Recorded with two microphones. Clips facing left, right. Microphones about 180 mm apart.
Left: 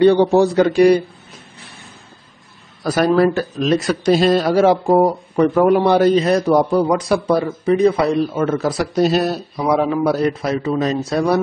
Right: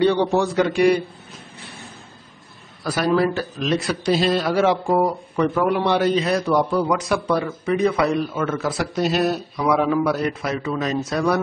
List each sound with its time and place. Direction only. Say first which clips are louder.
0.0 s a man's voice: left 6 dB; 45° left (ahead or behind)
2.8 s a man's voice: left 5 dB; 45° left (ahead or behind)